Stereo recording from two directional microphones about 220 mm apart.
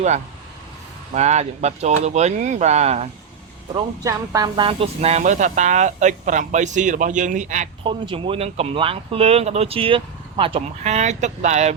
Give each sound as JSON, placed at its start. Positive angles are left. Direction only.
{"t": 1.1, "sound": "speech", "side_deg": -30}
{"t": 3.8, "sound": "speech", "side_deg": -15}
{"t": 7.9, "sound": "speech", "side_deg": -25}